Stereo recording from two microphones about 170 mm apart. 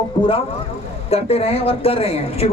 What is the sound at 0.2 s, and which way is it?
A man's voice, 30° left (ahead or behind).